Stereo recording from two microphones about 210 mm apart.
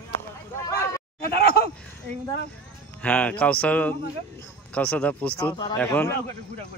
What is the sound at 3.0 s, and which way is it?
Speech, 5° left (ahead or behind).